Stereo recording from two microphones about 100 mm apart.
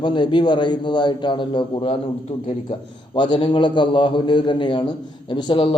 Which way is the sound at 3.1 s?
50° left (ahead or behind).